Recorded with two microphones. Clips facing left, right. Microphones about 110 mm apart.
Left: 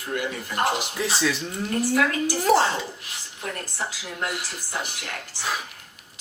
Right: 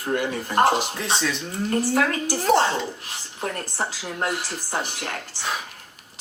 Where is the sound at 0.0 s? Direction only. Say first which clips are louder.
Right 4 dB; 40° right (ahead or behind).